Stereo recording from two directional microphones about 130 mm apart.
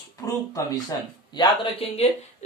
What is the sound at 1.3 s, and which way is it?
Speech, 50° left (ahead or behind).